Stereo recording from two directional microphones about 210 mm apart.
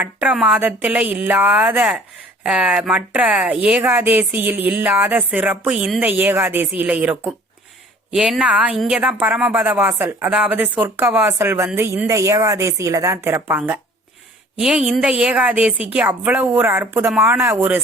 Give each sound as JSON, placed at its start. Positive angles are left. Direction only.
{"t": 0.0, "sound": "a woman's voice", "side_deg": -5}